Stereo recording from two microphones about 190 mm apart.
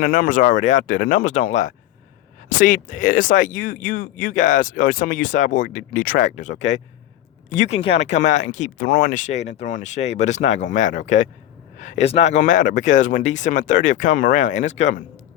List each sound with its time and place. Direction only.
0.0 s speech: 45° left (ahead or behind)